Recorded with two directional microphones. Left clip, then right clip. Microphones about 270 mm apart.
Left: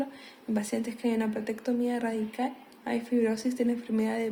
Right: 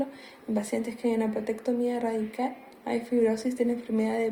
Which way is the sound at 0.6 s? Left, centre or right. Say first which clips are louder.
Right 3 dB; left.